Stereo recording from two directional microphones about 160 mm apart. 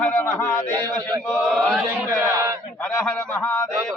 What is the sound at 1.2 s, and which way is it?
Speech, 5° left (ahead or behind).